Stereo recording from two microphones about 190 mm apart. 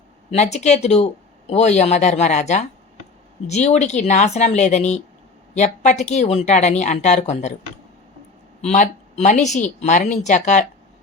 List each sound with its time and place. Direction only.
0.3 s speech: 35° left (ahead or behind)
8.6 s speech: 40° left (ahead or behind)